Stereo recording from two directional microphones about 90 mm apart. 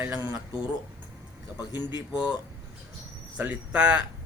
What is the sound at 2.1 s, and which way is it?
Speech, 10° right (ahead or behind).